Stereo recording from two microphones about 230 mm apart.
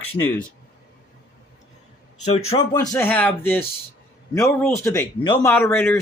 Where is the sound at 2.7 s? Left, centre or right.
Centre.